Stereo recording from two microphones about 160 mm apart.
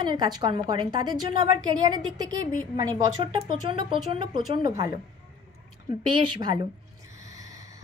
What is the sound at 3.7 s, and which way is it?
Speech, 30° right (ahead or behind).